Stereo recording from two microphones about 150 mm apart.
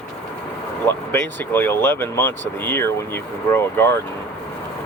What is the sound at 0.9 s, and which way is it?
Speech, 15° left (ahead or behind).